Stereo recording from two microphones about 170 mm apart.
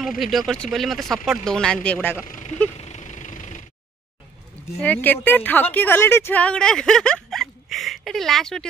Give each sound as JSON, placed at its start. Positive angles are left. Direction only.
{"t": 0.2, "sound": "speech", "side_deg": 0}
{"t": 2.2, "sound": "speech", "side_deg": 50}
{"t": 2.8, "sound": "vehicle", "side_deg": 40}
{"t": 4.7, "sound": "a woman's voice", "side_deg": 10}